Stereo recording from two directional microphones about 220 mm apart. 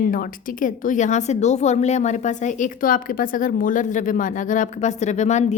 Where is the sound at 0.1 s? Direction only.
40° left (ahead or behind).